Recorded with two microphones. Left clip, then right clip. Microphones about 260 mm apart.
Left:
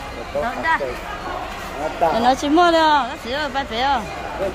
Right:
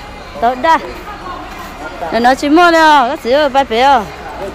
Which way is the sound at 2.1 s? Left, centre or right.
Centre.